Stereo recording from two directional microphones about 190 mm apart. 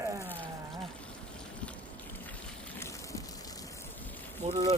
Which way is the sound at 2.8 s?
15° left (ahead or behind).